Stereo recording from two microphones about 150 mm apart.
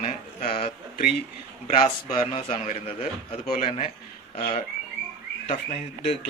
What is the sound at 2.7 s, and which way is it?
Speech, 40° left (ahead or behind).